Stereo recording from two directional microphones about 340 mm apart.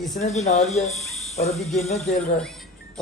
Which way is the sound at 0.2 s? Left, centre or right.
Centre.